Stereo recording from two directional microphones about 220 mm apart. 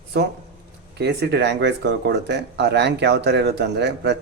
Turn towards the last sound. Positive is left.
turn(degrees=-50)  # may be behind; listen again after turning